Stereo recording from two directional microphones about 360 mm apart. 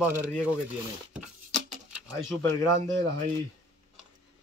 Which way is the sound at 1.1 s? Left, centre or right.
Centre.